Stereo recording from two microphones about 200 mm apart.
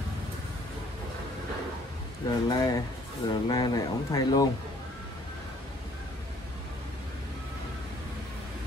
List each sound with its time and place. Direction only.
2.2 s speech: 20° left (ahead or behind)